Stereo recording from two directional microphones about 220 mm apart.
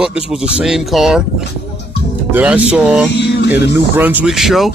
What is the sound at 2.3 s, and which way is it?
Music, 5° right (ahead or behind).